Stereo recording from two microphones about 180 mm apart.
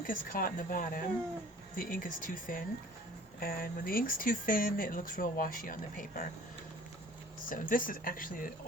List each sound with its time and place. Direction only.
0.1 s speech: 50° left (ahead or behind)
7.5 s speech: 50° left (ahead or behind)